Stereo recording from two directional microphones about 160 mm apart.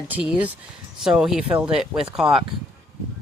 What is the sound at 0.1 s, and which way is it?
Speech, 10° right (ahead or behind).